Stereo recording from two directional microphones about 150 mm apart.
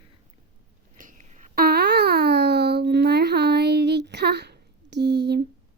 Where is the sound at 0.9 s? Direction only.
60° right (ahead or behind).